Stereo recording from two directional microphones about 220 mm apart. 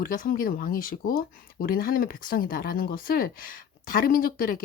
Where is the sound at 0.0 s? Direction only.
40° left (ahead or behind).